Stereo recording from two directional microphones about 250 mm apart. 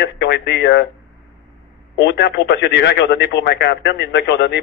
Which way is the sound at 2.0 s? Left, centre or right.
Left.